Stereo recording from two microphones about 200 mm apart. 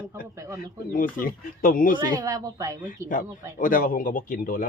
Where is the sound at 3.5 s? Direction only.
40° left (ahead or behind).